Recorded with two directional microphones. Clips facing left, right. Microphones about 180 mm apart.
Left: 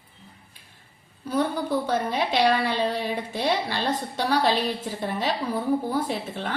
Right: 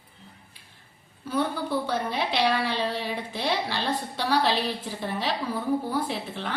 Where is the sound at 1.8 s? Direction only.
45° left (ahead or behind).